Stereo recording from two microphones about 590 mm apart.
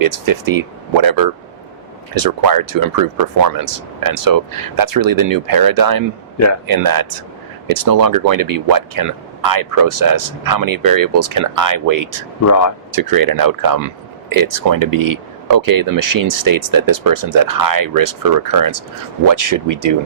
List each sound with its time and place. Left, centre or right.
0.0 s speech: right
12.5 s a man's voice: left
12.9 s speech: right